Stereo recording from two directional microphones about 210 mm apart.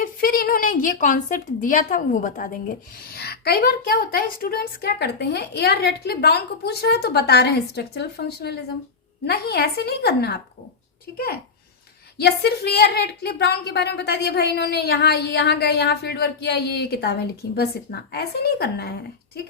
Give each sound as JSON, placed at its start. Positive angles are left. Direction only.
{"t": 0.0, "sound": "a woman's voice", "side_deg": 45}
{"t": 12.1, "sound": "a woman's voice", "side_deg": 50}